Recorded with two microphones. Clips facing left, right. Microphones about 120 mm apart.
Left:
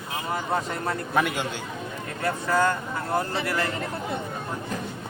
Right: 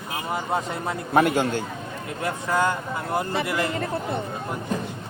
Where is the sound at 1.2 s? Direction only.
45° right (ahead or behind).